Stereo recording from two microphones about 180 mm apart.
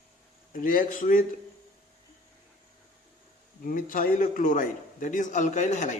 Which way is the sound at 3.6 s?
50° left (ahead or behind).